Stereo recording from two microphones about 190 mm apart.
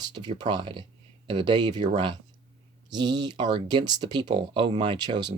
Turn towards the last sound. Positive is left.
turn(degrees=-25)  # may be behind; listen again after turning